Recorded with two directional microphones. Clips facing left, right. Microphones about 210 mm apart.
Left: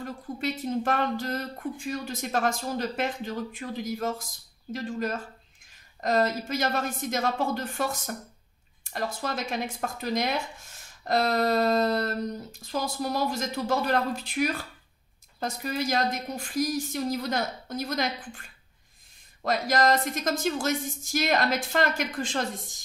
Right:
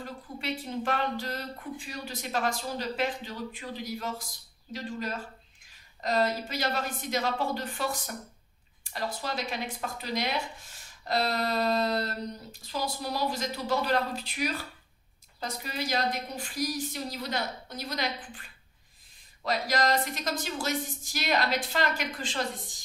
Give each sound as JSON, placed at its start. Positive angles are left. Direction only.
{"t": 0.0, "sound": "speech", "side_deg": 45}
{"t": 19.4, "sound": "speech", "side_deg": 45}